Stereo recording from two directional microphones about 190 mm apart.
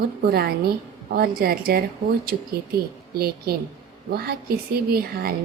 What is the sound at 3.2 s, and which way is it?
A woman's voice, 55° right (ahead or behind).